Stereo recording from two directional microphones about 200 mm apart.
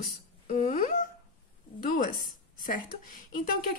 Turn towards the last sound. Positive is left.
turn(degrees=45)  # may be behind; listen again after turning